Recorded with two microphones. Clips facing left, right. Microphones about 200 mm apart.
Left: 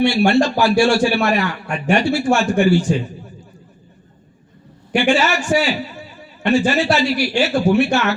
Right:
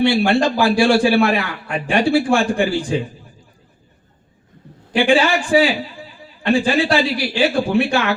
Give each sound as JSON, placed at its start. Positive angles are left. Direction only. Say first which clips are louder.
{"t": 0.3, "sound": "a man's voice", "louder": "left 1 dB", "side_deg": -55}
{"t": 4.9, "sound": "a man's voice", "louder": "right 1 dB", "side_deg": -55}